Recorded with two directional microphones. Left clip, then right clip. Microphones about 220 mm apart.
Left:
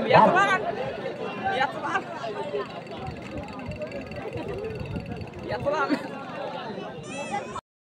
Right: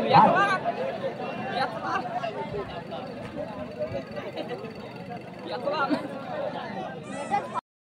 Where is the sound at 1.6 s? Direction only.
15° left (ahead or behind).